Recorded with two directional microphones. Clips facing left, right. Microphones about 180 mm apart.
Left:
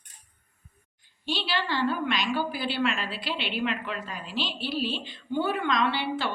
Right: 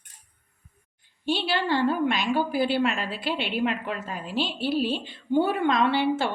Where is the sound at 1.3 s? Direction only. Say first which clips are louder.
Right 5 dB; 55° right (ahead or behind).